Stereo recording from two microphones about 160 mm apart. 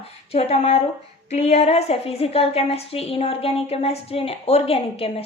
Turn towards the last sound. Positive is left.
turn(degrees=35)  # may be behind; listen again after turning